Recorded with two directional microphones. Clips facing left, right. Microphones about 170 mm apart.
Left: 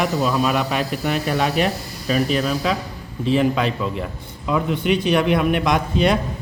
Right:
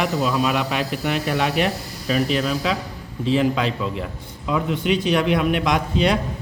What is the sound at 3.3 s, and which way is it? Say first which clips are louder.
Speech: left 1 dB; 55° left (ahead or behind).